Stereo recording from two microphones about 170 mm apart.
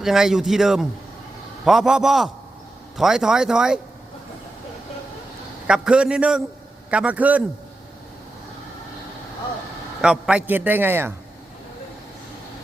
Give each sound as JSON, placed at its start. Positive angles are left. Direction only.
{"t": 0.0, "sound": "a man's voice", "side_deg": 0}
{"t": 5.6, "sound": "a man's voice", "side_deg": -5}
{"t": 10.0, "sound": "a man's voice", "side_deg": -5}